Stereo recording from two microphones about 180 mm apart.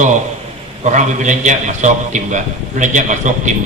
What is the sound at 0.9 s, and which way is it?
A man's voice, 40° right (ahead or behind).